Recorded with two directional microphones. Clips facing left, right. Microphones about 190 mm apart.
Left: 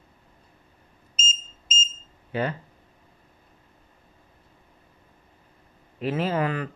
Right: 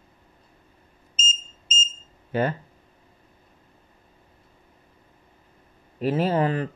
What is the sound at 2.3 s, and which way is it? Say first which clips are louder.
Speech: right 3 dB; 45° right (ahead or behind).